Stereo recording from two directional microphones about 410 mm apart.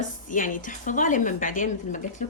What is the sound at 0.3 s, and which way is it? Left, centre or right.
Speech, centre.